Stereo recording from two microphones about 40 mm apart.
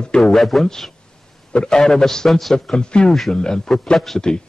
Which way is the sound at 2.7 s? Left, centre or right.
Left.